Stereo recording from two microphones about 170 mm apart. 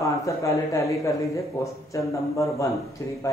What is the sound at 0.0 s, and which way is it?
Speech, 20° left (ahead or behind).